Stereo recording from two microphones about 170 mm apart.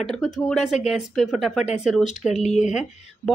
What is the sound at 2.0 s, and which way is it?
Speech, 45° left (ahead or behind).